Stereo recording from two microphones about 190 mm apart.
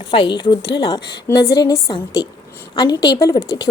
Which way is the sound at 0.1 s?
25° left (ahead or behind).